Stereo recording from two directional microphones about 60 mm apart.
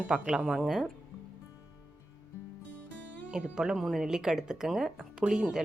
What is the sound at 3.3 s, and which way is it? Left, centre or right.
Speech, centre.